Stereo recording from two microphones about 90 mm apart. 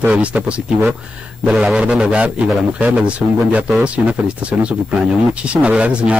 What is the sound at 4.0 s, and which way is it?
Speech, 15° right (ahead or behind).